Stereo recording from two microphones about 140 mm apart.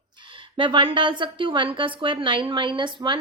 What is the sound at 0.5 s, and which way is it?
A woman's voice, 40° right (ahead or behind).